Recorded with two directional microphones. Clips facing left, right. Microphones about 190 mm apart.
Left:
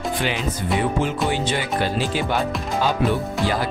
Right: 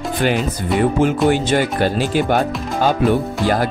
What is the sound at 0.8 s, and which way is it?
Speech, 50° right (ahead or behind).